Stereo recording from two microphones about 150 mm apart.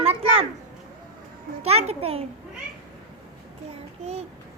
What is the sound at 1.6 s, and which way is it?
Speech, 45° right (ahead or behind).